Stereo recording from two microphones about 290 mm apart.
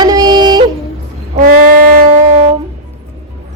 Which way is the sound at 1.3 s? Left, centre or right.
Right.